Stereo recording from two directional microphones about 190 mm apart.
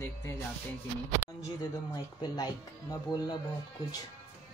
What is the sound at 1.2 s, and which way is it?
Speech, 45° left (ahead or behind).